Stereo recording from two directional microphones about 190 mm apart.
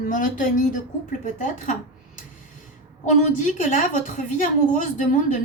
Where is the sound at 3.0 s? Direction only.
40° left (ahead or behind).